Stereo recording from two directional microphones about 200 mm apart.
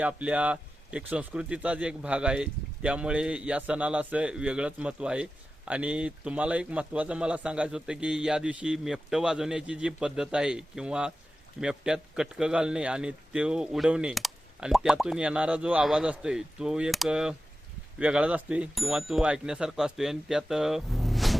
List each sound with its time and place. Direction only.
0.0 s speech: 5° right (ahead or behind)